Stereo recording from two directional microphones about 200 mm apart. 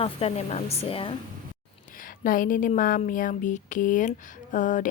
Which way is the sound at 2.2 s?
45° left (ahead or behind).